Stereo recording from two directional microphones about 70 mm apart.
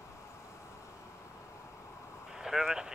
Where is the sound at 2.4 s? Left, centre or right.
Centre.